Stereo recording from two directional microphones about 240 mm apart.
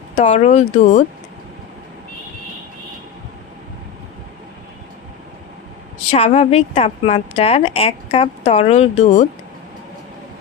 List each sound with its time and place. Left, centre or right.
0.2 s a woman's voice: left
6.1 s a woman's voice: left